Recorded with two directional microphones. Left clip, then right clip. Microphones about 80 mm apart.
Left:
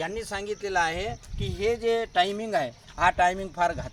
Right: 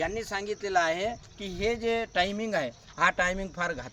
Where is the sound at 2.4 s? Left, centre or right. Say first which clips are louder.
Left 3 dB; right.